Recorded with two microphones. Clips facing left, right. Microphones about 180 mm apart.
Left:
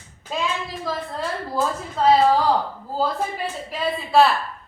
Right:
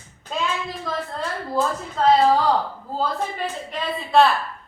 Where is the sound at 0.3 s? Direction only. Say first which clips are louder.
Even; 5° left (ahead or behind).